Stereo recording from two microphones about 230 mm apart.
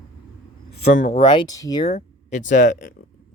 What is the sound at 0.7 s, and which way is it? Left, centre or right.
Speech, left.